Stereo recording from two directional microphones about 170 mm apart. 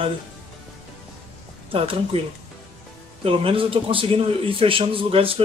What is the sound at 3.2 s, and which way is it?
A man's voice, 30° right (ahead or behind).